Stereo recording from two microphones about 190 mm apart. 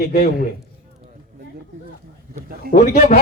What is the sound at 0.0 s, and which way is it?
Speech, 50° left (ahead or behind).